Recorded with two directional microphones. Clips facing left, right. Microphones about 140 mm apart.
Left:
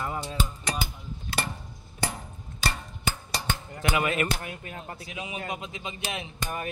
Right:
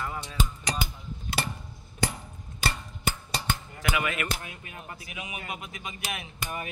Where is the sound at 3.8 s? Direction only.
30° left (ahead or behind).